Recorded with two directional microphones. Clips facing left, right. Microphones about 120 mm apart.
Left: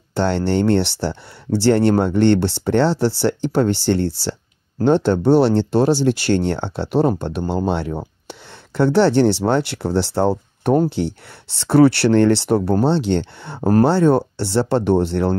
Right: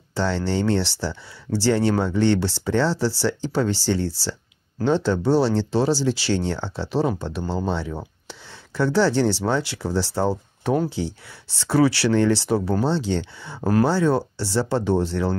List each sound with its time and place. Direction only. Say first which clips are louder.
0.1 s speech: left 5 dB; 60° left (ahead or behind)